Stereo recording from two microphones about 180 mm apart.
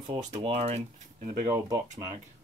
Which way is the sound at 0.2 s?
40° right (ahead or behind).